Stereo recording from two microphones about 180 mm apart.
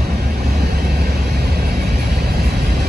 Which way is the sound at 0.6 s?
65° right (ahead or behind).